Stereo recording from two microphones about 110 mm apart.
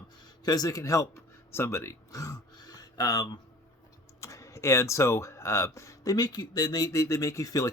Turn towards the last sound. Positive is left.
turn(degrees=30)  # may be behind; listen again after turning